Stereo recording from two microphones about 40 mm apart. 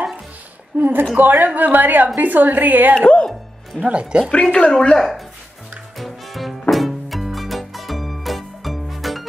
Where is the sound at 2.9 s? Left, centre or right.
Left.